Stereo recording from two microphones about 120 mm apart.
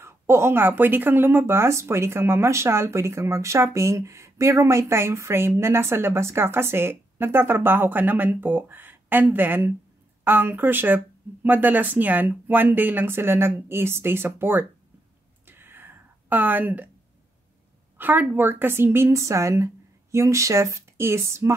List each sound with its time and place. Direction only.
0.0 s speech: 20° right (ahead or behind)
15.4 s a sound: 15° right (ahead or behind)
17.9 s speech: 15° right (ahead or behind)